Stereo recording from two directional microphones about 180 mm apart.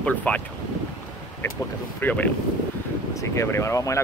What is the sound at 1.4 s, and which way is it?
Speech, 15° left (ahead or behind).